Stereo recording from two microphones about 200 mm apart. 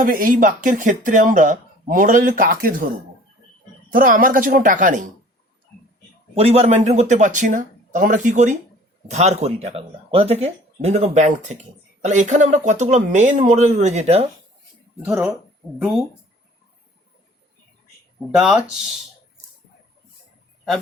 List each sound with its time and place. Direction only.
0.0 s speech: 45° right (ahead or behind)
3.8 s speech: 45° right (ahead or behind)
6.3 s speech: 30° right (ahead or behind)
15.0 s speech: 5° right (ahead or behind)
18.3 s speech: centre (ahead or behind)